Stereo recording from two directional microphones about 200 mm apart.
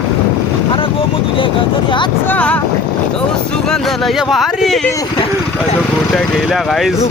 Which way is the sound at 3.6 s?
Centre (ahead or behind).